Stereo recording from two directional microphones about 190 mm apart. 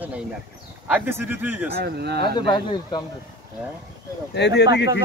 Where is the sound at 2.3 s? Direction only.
25° left (ahead or behind).